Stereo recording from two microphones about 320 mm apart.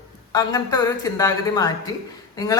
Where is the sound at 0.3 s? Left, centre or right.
Centre.